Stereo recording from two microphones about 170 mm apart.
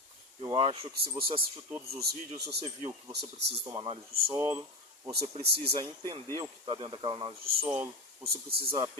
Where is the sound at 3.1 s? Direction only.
75° right (ahead or behind).